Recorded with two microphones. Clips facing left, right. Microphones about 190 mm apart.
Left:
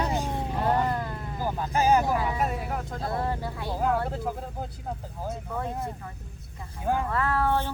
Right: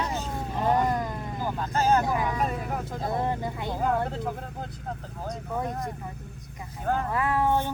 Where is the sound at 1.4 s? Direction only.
10° left (ahead or behind).